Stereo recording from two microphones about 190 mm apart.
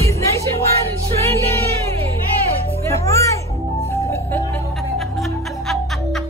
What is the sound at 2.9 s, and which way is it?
Music, 15° left (ahead or behind).